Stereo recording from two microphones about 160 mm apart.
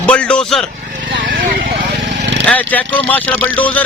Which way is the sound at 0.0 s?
5° left (ahead or behind).